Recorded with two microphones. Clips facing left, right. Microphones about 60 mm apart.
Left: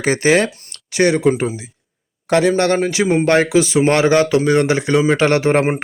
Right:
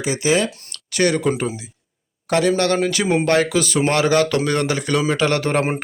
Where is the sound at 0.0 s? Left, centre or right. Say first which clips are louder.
Left 4 dB; left.